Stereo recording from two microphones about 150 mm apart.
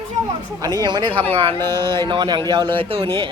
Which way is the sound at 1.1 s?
10° left (ahead or behind).